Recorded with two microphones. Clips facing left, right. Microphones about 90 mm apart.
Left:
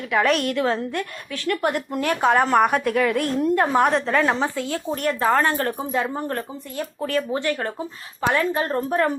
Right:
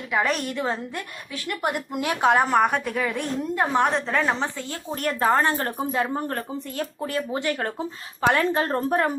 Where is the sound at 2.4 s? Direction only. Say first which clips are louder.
Left 3 dB; centre (ahead or behind).